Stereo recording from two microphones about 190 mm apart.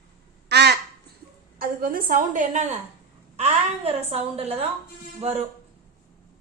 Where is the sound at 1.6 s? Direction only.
50° right (ahead or behind).